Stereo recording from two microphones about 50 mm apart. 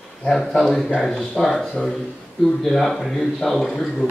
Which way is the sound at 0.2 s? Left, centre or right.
Centre.